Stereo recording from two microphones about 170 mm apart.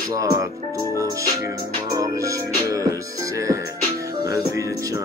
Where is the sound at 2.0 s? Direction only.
20° right (ahead or behind).